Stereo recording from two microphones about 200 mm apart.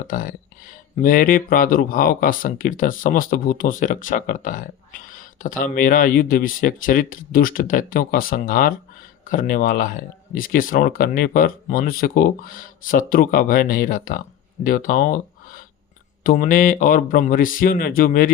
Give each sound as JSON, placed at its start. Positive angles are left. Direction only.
{"t": 0.1, "sound": "speech", "side_deg": 45}